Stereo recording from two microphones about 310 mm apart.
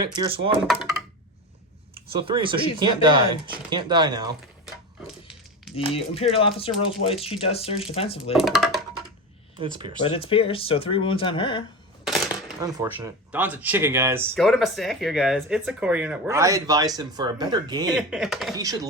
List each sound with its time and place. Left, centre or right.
0.0 s speech: centre
2.1 s speech: centre
5.0 s a sound: centre
5.7 s speech: centre
8.3 s speech: centre
9.6 s speech: centre
10.0 s speech: centre
12.0 s a sound: centre
12.6 s speech: centre
17.9 s speech: centre
18.5 s speech: centre